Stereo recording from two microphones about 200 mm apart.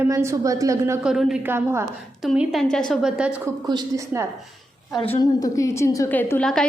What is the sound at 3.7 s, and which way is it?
Speech, 15° right (ahead or behind).